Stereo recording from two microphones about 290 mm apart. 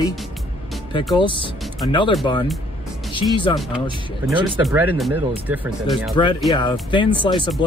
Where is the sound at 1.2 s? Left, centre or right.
Centre.